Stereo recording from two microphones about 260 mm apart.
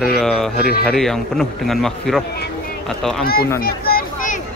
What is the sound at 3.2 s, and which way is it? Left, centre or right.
Speech, left.